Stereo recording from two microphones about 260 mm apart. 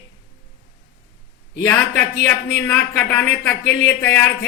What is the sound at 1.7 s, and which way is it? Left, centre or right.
A man's voice, centre.